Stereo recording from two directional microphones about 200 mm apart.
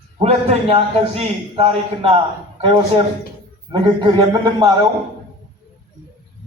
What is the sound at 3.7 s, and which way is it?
Speech, 20° right (ahead or behind).